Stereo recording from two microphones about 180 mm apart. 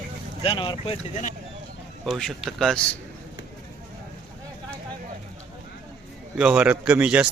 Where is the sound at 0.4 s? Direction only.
30° left (ahead or behind).